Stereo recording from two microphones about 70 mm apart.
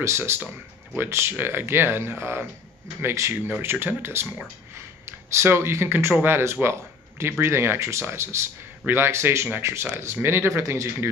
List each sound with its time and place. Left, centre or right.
0.0 s speech: right